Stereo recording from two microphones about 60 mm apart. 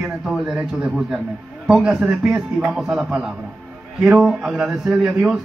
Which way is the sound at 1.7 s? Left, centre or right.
Centre.